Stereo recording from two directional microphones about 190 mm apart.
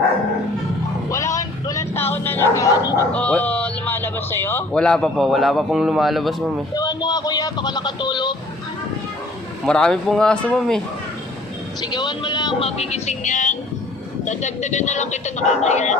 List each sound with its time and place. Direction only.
1.1 s bow-wow: 15° left (ahead or behind)
3.1 s speech: 5° left (ahead or behind)
6.7 s speech: 20° left (ahead or behind)
9.6 s speech: 5° left (ahead or behind)
11.8 s speech: 20° left (ahead or behind); by 16.0 s 40° left (ahead or behind)